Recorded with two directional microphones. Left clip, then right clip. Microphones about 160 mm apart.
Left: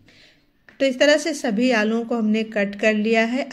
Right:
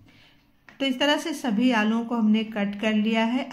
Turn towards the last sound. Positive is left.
turn(degrees=20)  # may be behind; listen again after turning